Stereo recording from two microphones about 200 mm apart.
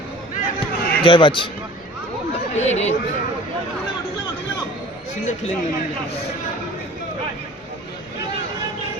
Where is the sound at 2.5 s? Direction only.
35° left (ahead or behind).